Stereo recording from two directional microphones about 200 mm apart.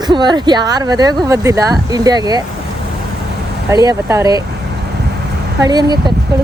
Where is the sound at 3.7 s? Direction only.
20° right (ahead or behind).